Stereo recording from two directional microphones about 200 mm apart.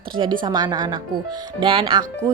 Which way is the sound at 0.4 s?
20° right (ahead or behind).